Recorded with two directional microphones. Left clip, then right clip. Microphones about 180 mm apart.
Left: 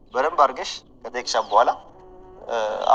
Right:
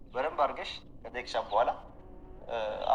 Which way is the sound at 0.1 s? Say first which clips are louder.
Left 11 dB; 30° left (ahead or behind).